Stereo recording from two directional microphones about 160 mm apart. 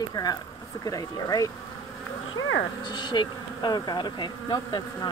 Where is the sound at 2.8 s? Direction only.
30° left (ahead or behind).